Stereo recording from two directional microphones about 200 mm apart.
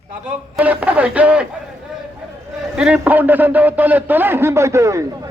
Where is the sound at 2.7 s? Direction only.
5° right (ahead or behind).